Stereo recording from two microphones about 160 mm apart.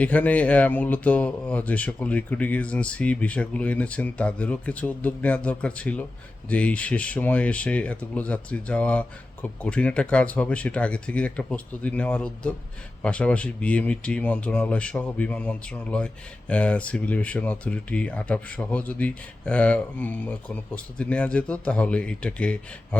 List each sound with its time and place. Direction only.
0.0 s speech: 10° left (ahead or behind)